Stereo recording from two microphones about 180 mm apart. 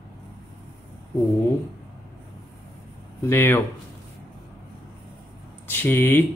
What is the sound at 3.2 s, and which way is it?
Speech, 15° left (ahead or behind).